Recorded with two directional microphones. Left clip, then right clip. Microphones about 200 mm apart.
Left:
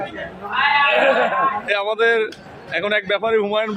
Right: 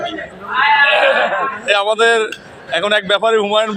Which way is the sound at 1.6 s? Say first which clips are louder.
Right 5 dB; centre (ahead or behind).